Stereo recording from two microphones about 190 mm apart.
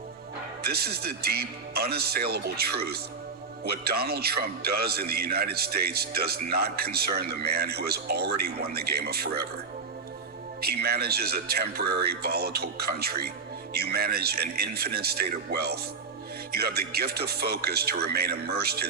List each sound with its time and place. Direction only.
0.6 s a man's voice: 55° right (ahead or behind)
10.6 s a man's voice: 55° right (ahead or behind)